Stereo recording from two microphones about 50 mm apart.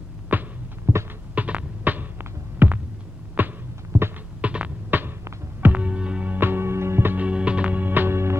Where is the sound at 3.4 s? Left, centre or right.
Right.